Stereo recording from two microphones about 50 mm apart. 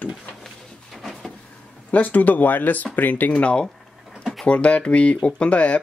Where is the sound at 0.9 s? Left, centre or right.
Centre.